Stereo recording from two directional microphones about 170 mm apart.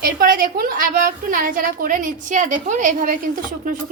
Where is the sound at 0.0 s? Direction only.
60° right (ahead or behind).